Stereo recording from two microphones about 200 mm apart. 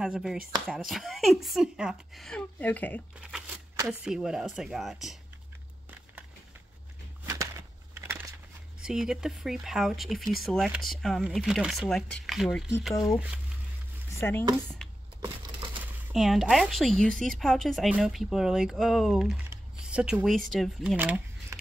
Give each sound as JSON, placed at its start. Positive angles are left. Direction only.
{"t": 0.0, "sound": "speech", "side_deg": -5}
{"t": 3.2, "sound": "crumpling", "side_deg": -5}
{"t": 4.0, "sound": "speech", "side_deg": -5}
{"t": 7.9, "sound": "a sound", "side_deg": -10}
{"t": 8.8, "sound": "speech", "side_deg": -5}
{"t": 14.2, "sound": "speech", "side_deg": 10}
{"t": 14.8, "sound": "a sound", "side_deg": 0}
{"t": 15.8, "sound": "speech", "side_deg": -5}